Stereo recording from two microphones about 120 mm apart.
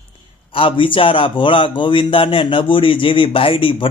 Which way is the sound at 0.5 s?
45° left (ahead or behind).